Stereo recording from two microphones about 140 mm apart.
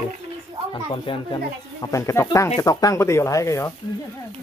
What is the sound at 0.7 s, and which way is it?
Speech, 35° left (ahead or behind).